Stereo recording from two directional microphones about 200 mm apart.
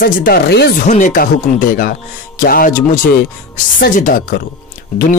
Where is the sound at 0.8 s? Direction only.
40° left (ahead or behind).